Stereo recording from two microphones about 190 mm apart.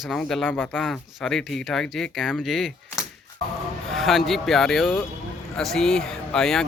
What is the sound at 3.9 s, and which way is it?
Speech, centre (ahead or behind).